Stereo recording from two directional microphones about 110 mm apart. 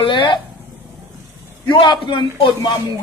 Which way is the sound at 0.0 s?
50° left (ahead or behind).